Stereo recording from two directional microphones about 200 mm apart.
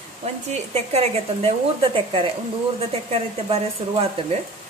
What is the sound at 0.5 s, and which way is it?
Speech, 30° right (ahead or behind).